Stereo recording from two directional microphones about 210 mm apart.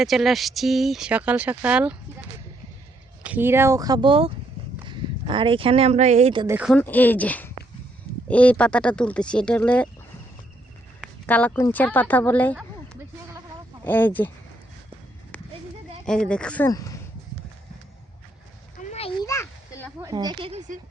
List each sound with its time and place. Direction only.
0.0 s speech: centre (ahead or behind)
3.2 s speech: 10° right (ahead or behind); by 6.5 s 25° right (ahead or behind)
6.5 s speech: 5° right (ahead or behind)
6.7 s speech: 10° left (ahead or behind)
11.3 s speech: 5° left (ahead or behind)
13.8 s speech: 10° left (ahead or behind)
16.0 s speech: 5° left (ahead or behind)
18.8 s a sound: 30° left (ahead or behind)
19.2 s a sound: 15° left (ahead or behind)
20.0 s speech: 15° right (ahead or behind); by 20.7 s 30° right (ahead or behind)